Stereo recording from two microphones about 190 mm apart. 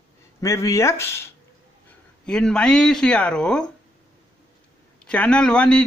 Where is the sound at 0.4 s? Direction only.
15° left (ahead or behind).